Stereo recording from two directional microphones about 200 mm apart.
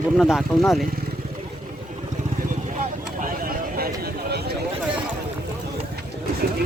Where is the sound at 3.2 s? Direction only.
45° right (ahead or behind).